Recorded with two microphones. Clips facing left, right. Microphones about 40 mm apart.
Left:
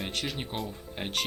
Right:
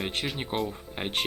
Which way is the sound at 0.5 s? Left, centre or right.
Right.